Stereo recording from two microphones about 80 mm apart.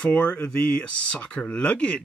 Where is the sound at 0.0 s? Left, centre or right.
Centre.